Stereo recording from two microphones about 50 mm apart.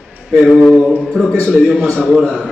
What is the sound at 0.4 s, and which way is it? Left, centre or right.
Speech, centre.